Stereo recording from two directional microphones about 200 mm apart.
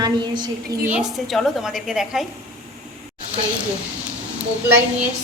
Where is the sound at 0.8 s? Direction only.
5° right (ahead or behind).